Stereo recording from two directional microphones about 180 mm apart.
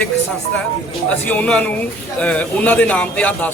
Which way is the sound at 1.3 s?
5° left (ahead or behind).